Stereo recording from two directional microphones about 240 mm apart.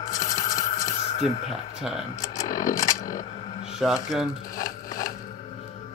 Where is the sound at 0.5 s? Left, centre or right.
Centre.